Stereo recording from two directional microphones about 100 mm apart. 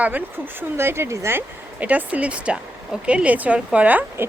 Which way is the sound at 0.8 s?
25° right (ahead or behind).